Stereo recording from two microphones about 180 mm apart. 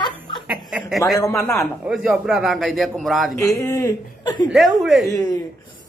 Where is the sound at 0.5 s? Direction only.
5° right (ahead or behind).